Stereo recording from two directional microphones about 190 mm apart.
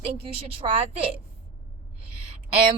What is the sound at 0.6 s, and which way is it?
Speech, 30° right (ahead or behind).